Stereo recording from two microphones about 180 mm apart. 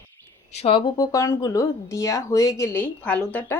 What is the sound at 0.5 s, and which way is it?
Speech, 30° left (ahead or behind).